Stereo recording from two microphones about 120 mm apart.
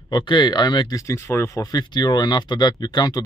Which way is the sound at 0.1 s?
40° left (ahead or behind).